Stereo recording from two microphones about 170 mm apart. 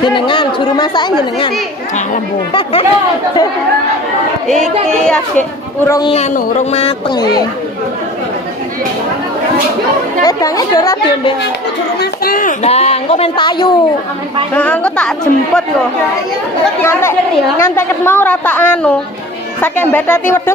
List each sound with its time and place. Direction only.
0.0 s speech: 30° left (ahead or behind)
2.5 s speech: 35° left (ahead or behind)
5.9 s speech: 20° left (ahead or behind)
6.1 s speech: 40° left (ahead or behind)
10.2 s speech: 20° left (ahead or behind)
12.0 s speech: 60° left (ahead or behind)
12.6 s speech: 40° left (ahead or behind)
14.5 s a woman's voice: 10° left (ahead or behind)
16.8 s a woman's voice: 15° left (ahead or behind)